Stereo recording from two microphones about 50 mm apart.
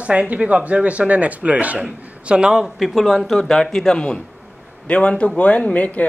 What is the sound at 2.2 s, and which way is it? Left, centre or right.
Speech, centre.